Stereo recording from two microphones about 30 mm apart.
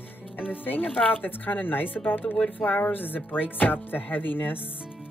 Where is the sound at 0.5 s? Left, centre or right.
Left.